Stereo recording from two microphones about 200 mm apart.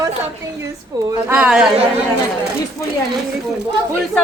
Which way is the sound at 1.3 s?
5° right (ahead or behind).